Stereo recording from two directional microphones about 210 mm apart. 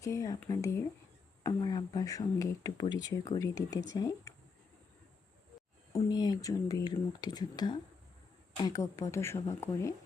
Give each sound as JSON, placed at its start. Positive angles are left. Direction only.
{"t": 0.0, "sound": "speech", "side_deg": 15}
{"t": 5.9, "sound": "speech", "side_deg": 20}